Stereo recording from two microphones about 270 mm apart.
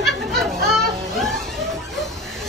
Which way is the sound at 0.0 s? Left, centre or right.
Centre.